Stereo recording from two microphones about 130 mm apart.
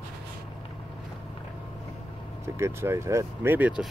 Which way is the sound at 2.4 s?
20° right (ahead or behind).